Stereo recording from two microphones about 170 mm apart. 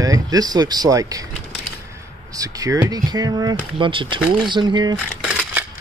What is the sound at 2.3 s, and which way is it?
Speech, 20° right (ahead or behind).